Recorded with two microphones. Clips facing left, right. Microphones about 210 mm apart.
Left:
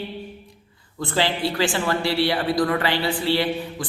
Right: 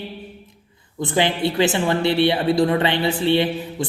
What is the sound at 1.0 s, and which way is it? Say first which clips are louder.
A man's voice: right 3 dB; 20° right (ahead or behind).